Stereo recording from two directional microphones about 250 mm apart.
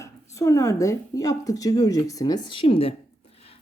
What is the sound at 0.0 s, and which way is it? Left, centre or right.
A woman's voice, centre.